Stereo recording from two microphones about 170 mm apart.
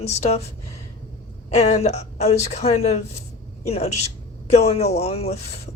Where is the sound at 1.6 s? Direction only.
40° left (ahead or behind).